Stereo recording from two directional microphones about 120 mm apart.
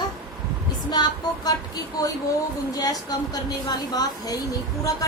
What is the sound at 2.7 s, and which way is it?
A woman's voice, 30° left (ahead or behind).